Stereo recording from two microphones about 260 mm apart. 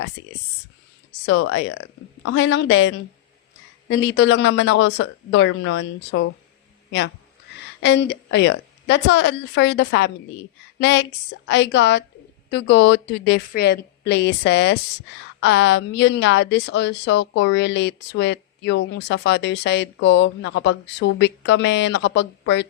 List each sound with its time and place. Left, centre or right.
1.2 s a woman's voice: left
7.8 s a woman's voice: left